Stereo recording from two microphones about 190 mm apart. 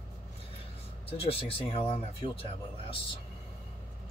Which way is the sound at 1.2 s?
30° left (ahead or behind).